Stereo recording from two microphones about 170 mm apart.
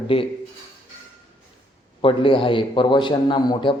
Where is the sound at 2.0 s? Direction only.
30° left (ahead or behind).